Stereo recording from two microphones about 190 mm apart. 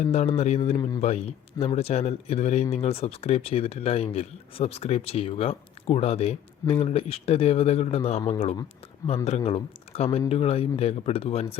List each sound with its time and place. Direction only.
0.0 s speech: 35° left (ahead or behind)
0.8 s speech: 20° left (ahead or behind)
1.0 s speech: 35° left (ahead or behind)